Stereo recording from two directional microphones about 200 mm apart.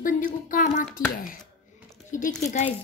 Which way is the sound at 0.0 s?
40° left (ahead or behind).